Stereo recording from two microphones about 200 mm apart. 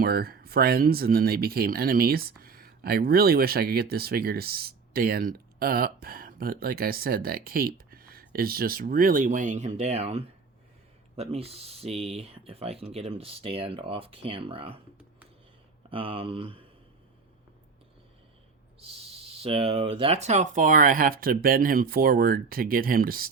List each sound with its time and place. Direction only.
0.0 s speech: 50° right (ahead or behind); by 14.8 s 25° right (ahead or behind)
15.9 s speech: 25° right (ahead or behind)
19.4 s speech: 30° right (ahead or behind); by 23.3 s 45° right (ahead or behind)